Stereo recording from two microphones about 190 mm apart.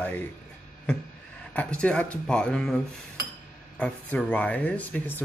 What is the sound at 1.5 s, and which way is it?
Speech, 5° left (ahead or behind).